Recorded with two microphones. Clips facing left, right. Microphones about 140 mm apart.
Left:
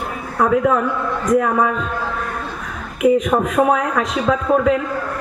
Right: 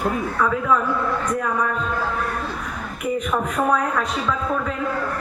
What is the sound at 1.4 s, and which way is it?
Speech, 75° left (ahead or behind).